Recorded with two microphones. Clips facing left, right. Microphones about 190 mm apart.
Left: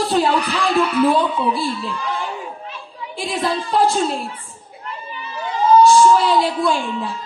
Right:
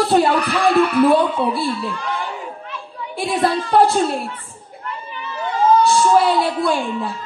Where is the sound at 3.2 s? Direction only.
60° right (ahead or behind).